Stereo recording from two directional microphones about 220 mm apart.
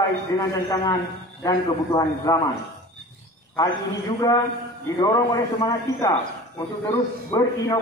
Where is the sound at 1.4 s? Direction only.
15° left (ahead or behind).